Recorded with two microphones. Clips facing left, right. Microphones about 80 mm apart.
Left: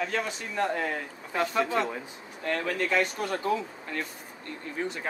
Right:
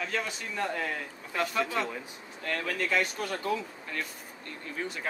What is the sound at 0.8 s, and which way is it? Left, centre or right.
Speech, centre.